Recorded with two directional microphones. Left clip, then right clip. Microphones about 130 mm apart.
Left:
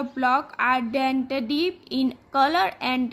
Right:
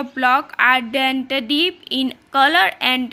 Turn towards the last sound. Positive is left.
turn(degrees=-5)  # may be behind; listen again after turning